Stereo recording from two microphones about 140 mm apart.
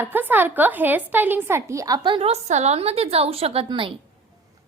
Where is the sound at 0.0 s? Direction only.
15° right (ahead or behind).